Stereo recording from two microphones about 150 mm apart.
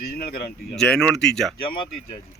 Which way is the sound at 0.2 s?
90° left.